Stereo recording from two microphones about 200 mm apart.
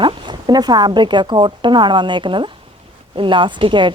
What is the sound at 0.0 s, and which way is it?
Speech, 20° right (ahead or behind).